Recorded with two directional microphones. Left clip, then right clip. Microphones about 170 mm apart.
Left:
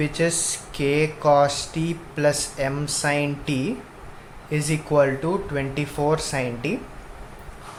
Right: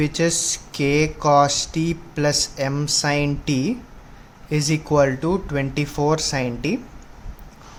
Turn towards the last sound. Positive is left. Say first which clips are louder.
# right 2 dB
turn(degrees=-50)  # may be behind; listen again after turning